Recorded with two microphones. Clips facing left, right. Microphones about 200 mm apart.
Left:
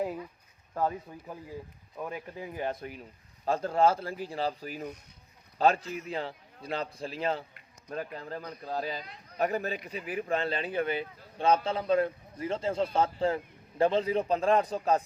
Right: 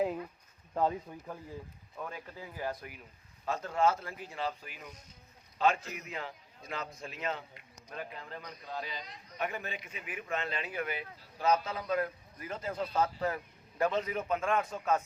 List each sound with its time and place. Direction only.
0.7 s speech: 20° right (ahead or behind)
2.0 s speech: 15° left (ahead or behind); by 15.0 s 35° left (ahead or behind)